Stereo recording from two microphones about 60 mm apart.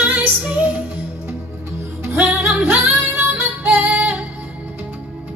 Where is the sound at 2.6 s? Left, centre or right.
Right.